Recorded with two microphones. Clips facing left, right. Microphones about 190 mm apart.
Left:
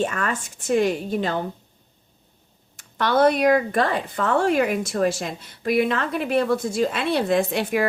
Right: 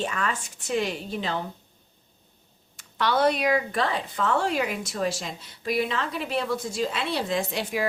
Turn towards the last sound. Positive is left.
turn(degrees=60)  # may be behind; listen again after turning